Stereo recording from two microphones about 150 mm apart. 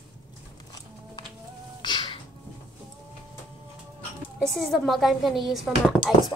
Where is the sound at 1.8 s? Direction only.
30° left (ahead or behind).